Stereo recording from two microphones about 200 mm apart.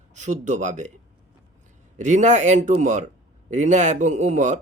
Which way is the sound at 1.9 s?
35° right (ahead or behind).